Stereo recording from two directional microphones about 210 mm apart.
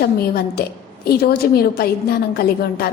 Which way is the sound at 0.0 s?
50° left (ahead or behind).